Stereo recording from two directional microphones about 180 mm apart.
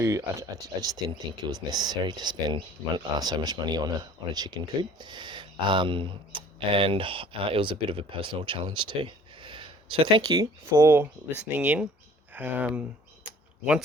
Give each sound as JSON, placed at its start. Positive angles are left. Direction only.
{"t": 0.0, "sound": "speech", "side_deg": -15}